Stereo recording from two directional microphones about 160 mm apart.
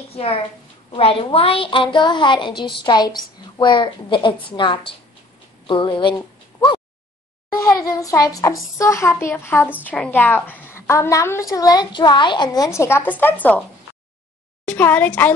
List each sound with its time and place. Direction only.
0.1 s a woman's voice: 35° left (ahead or behind); by 13.6 s 10° left (ahead or behind)
14.7 s a woman's voice: 10° left (ahead or behind)